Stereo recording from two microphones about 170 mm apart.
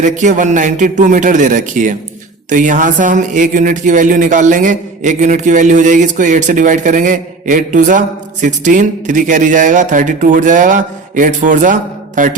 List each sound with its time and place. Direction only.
0.0 s speech: 45° right (ahead or behind)